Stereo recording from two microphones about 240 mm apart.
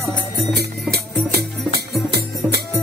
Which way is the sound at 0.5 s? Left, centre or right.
Right.